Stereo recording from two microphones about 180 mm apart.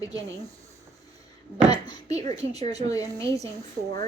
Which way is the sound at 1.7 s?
20° left (ahead or behind).